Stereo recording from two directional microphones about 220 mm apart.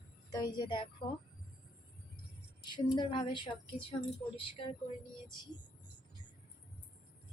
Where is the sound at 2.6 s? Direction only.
20° left (ahead or behind).